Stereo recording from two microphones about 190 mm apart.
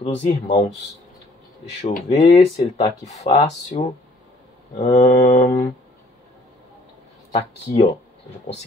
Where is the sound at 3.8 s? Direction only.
35° left (ahead or behind).